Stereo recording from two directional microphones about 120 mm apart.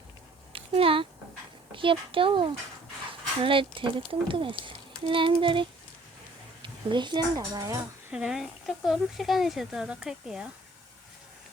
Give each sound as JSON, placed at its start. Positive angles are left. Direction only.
{"t": 0.5, "sound": "a sound", "side_deg": -50}
{"t": 1.7, "sound": "speech", "side_deg": -45}
{"t": 8.1, "sound": "speech", "side_deg": -5}